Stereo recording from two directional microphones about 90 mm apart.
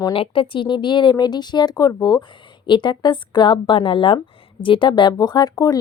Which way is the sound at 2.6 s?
60° left (ahead or behind).